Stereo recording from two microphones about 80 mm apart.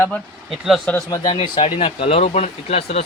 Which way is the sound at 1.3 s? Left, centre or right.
Left.